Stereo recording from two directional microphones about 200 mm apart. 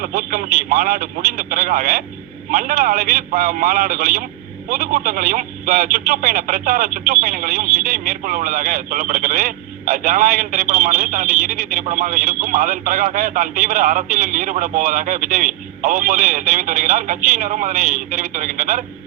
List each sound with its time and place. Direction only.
0.0 s a man's voice: 45° right (ahead or behind)